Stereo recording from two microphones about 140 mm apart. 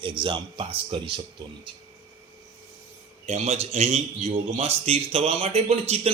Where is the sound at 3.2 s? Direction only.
50° right (ahead or behind).